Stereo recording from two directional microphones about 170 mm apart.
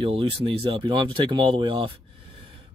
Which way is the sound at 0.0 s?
30° right (ahead or behind).